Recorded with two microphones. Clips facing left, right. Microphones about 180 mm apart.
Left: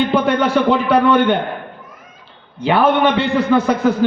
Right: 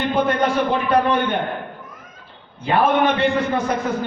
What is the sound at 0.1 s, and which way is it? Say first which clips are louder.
A man's voice: left 4 dB; 75° left (ahead or behind).